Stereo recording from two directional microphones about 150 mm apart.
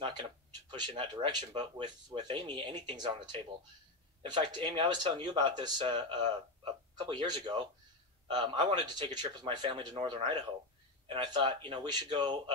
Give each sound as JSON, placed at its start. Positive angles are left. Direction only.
{"t": 0.0, "sound": "speech", "side_deg": -35}